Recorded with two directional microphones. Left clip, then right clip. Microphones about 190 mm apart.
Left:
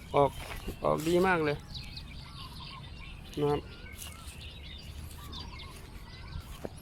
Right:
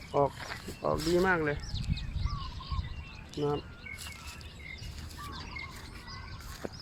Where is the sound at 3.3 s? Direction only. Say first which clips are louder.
Left 2 dB; 15° left (ahead or behind).